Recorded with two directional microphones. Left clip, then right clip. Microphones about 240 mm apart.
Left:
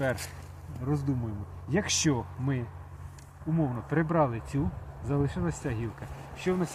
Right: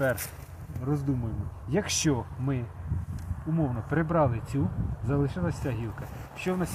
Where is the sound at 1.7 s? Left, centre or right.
Centre.